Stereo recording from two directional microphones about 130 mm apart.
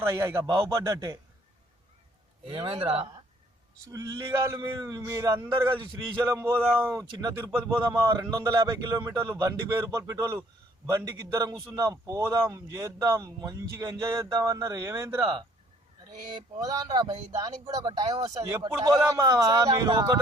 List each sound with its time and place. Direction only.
0.0 s speech: 20° right (ahead or behind)
2.6 s speech: 45° right (ahead or behind)
3.9 s speech: 25° right (ahead or behind)
16.3 s a sound: 30° right (ahead or behind)
17.7 s speech: 30° right (ahead or behind)